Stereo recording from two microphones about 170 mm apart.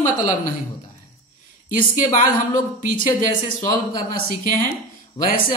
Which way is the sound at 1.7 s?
50° left (ahead or behind).